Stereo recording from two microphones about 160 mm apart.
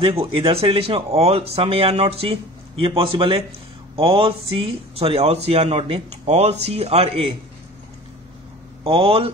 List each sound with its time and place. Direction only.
0.0 s speech: 35° right (ahead or behind)
8.8 s speech: 35° right (ahead or behind)